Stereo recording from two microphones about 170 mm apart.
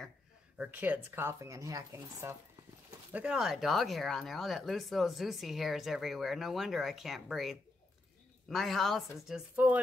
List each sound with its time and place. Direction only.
0.6 s speech: 10° right (ahead or behind)
3.1 s speech: 5° right (ahead or behind)